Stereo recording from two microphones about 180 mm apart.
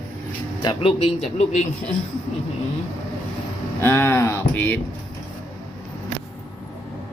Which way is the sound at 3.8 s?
15° left (ahead or behind).